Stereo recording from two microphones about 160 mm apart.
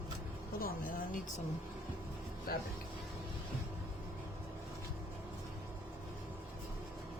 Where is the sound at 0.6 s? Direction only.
60° left (ahead or behind).